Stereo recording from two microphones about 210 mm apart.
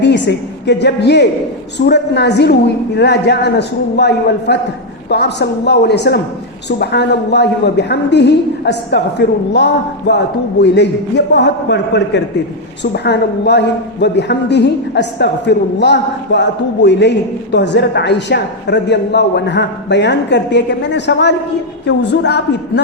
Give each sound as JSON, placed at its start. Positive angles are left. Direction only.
{"t": 0.0, "sound": "a woman's voice", "side_deg": 55}